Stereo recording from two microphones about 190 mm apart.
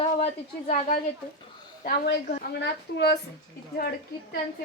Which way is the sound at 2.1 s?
65° left (ahead or behind).